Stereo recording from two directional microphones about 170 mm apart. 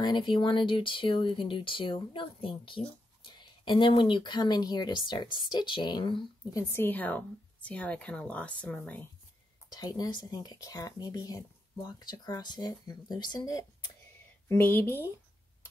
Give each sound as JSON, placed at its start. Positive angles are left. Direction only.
{"t": 0.0, "sound": "speech", "side_deg": 25}
{"t": 6.7, "sound": "speech", "side_deg": 10}
{"t": 9.7, "sound": "speech", "side_deg": 25}
{"t": 14.5, "sound": "speech", "side_deg": 10}